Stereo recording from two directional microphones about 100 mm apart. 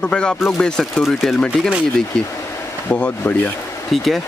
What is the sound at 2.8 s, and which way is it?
Speech, 15° left (ahead or behind).